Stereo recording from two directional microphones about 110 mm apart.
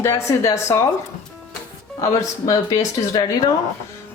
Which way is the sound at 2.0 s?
30° left (ahead or behind).